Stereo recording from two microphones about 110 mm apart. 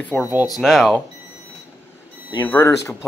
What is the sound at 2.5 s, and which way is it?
Speech, 25° left (ahead or behind).